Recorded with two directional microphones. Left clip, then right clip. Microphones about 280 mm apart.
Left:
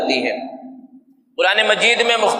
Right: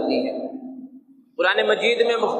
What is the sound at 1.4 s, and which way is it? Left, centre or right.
Speech, left.